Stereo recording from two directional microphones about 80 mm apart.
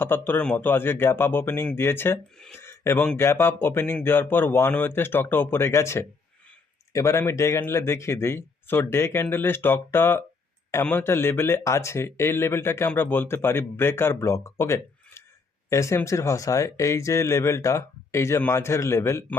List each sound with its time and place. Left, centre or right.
0.0 s speech: left
2.6 s a sound: left
3.2 s speech: left